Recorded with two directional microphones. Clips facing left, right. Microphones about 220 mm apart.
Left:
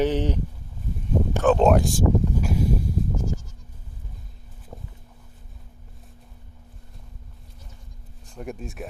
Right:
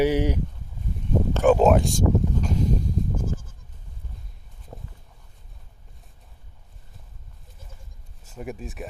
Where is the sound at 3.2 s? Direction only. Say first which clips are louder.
Left 1 dB; 55° right (ahead or behind).